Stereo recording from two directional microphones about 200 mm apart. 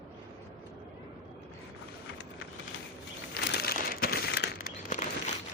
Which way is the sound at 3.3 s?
50° left (ahead or behind).